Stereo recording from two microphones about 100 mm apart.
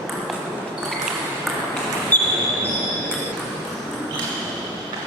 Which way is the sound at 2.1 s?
20° left (ahead or behind).